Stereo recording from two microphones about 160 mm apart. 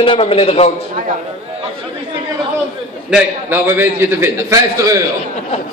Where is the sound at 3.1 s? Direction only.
15° right (ahead or behind).